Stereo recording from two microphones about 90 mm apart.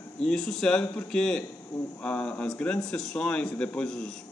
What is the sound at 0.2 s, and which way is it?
A man's voice, 5° left (ahead or behind).